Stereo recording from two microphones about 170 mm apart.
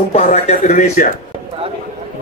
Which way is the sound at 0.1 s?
40° left (ahead or behind).